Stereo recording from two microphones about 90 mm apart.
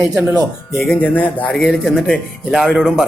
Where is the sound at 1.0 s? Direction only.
15° left (ahead or behind).